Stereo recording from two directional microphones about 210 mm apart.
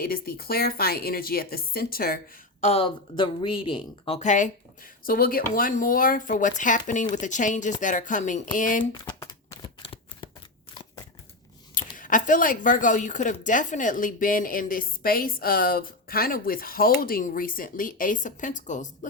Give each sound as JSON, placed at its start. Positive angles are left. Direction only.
{"t": 0.0, "sound": "speech", "side_deg": 45}
{"t": 2.6, "sound": "a woman's voice", "side_deg": 25}
{"t": 8.8, "sound": "shuffling cards", "side_deg": 20}
{"t": 11.9, "sound": "a woman's voice", "side_deg": 40}